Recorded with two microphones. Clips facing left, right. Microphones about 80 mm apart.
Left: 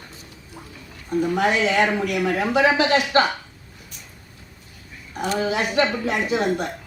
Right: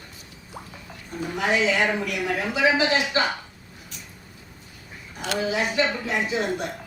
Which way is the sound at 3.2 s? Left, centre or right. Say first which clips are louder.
Left 8 dB; left.